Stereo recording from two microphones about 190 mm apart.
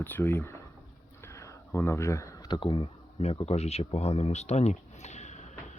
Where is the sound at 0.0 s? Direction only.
10° left (ahead or behind).